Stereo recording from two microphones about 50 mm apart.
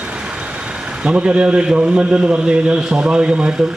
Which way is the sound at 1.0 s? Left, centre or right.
Right.